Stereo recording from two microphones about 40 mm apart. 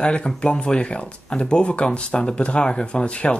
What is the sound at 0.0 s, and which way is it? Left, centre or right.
Speech, left.